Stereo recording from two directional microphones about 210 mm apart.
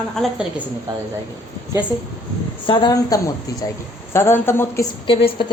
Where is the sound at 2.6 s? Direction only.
20° left (ahead or behind).